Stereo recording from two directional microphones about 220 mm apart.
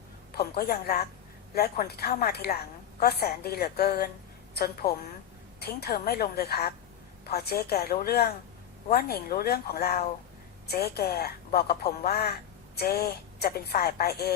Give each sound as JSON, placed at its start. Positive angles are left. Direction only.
{"t": 0.3, "sound": "a woman's voice", "side_deg": 45}